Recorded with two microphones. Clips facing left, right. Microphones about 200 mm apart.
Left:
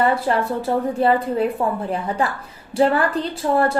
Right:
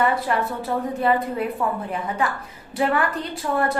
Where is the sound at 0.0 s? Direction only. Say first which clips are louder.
Left 3 dB; 30° left (ahead or behind).